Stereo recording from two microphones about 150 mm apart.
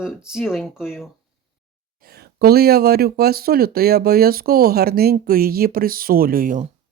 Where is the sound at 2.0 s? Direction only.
90° right; by 6.6 s 70° right (ahead or behind).